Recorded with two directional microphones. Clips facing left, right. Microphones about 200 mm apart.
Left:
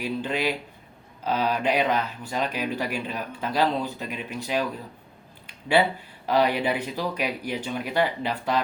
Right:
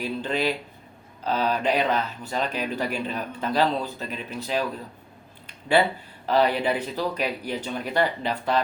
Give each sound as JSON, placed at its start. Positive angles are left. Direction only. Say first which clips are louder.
{"t": 0.0, "sound": "speech", "louder": "right 1 dB", "side_deg": 10}
{"t": 5.5, "sound": "a sound", "louder": "right 1 dB", "side_deg": 10}
{"t": 6.2, "sound": "speech", "louder": "right 1 dB", "side_deg": 10}